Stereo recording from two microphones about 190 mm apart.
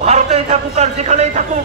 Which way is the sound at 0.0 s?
35° right (ahead or behind).